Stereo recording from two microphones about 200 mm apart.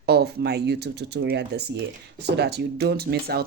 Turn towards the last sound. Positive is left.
turn(degrees=-50)  # may be behind; listen again after turning